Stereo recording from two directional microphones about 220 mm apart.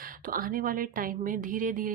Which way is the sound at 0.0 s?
40° right (ahead or behind).